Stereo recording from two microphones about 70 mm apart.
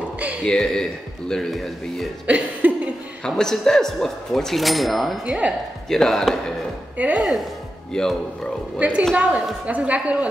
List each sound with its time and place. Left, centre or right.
0.4 s a man's voice: centre
2.6 s chuckle: right
3.3 s speech: centre
5.2 s speech: centre
5.9 s speech: centre
7.9 s a man's voice: centre
8.7 s a woman's voice: centre